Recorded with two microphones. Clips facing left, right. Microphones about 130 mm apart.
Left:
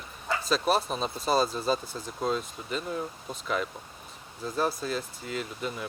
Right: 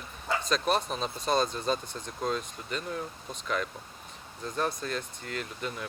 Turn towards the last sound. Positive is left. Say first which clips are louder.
# left 2 dB
turn(degrees=5)  # may be behind; listen again after turning